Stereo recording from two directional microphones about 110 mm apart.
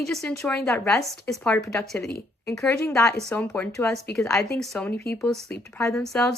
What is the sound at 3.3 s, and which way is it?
Speech, 15° left (ahead or behind).